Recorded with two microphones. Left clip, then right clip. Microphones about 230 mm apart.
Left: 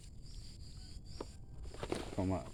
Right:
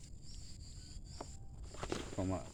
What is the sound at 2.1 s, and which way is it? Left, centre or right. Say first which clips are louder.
Speech: left 2 dB; left.